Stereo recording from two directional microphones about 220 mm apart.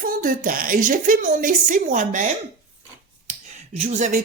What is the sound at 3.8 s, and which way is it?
Speech, 35° right (ahead or behind).